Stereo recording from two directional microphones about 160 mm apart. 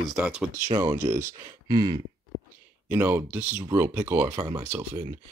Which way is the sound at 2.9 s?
15° right (ahead or behind).